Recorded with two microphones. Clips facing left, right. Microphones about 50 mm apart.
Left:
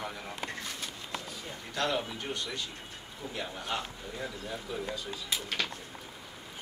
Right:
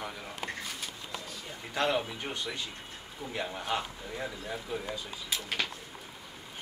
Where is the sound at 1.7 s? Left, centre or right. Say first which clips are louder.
Right 2 dB; centre.